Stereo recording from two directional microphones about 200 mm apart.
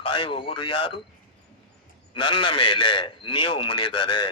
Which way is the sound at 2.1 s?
25° left (ahead or behind).